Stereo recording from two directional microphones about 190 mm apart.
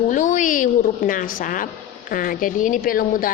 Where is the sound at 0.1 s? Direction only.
40° left (ahead or behind).